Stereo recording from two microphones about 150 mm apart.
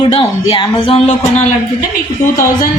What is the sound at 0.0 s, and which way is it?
Speech, 30° left (ahead or behind).